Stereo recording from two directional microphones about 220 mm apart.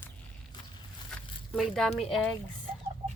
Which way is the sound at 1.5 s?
Centre (ahead or behind).